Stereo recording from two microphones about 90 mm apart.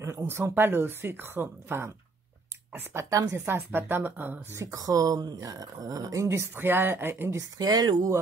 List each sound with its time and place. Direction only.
0.0 s a woman's voice: 30° right (ahead or behind)
6.2 s speech: 30° right (ahead or behind)
7.5 s speech: 45° right (ahead or behind)